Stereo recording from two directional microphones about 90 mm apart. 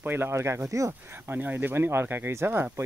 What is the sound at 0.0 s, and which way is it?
Speech, 25° right (ahead or behind).